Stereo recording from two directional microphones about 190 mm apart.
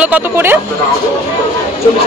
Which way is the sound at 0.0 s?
10° right (ahead or behind).